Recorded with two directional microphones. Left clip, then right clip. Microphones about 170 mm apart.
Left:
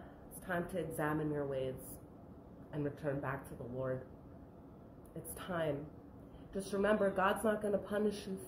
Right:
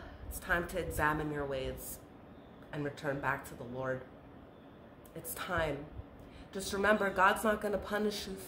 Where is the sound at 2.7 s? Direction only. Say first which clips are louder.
Right 2 dB; 20° right (ahead or behind).